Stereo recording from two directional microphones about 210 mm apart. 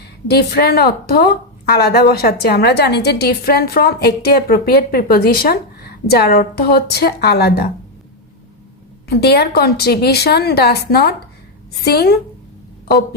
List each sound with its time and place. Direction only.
0.3 s a woman's voice: 50° left (ahead or behind)
9.0 s a woman's voice: 50° left (ahead or behind)